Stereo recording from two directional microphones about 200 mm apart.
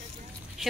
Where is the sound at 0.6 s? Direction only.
Centre (ahead or behind).